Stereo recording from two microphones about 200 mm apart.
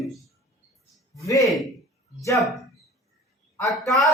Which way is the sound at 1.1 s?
15° left (ahead or behind).